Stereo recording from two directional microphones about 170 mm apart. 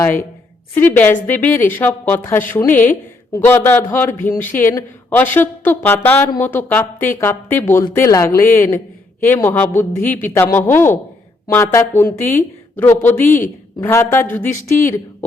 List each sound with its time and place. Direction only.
0.8 s a woman's voice: 10° left (ahead or behind)